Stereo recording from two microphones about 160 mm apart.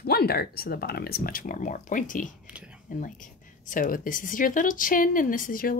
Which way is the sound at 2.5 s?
5° right (ahead or behind).